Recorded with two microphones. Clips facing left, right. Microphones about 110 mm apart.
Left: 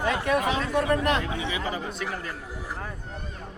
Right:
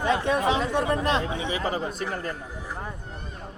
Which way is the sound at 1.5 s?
40° right (ahead or behind).